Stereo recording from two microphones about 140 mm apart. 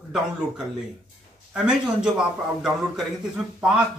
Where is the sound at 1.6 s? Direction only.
5° right (ahead or behind).